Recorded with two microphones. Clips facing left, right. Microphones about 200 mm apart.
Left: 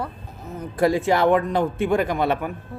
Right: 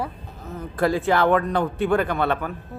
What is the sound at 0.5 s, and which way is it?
A man's voice, 15° left (ahead or behind).